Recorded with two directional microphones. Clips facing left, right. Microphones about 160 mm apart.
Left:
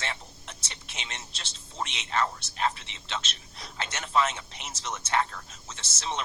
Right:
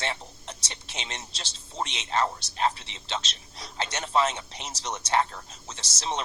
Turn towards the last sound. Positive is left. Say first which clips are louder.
# right 2 dB
turn(degrees=-35)  # may be behind; listen again after turning